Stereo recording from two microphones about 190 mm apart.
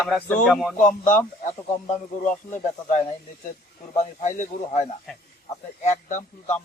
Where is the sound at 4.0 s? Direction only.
40° left (ahead or behind).